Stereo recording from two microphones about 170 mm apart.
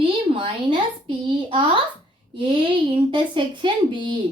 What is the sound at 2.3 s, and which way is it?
Speech, 30° right (ahead or behind).